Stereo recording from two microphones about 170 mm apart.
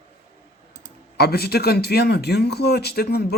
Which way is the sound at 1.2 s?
65° left (ahead or behind).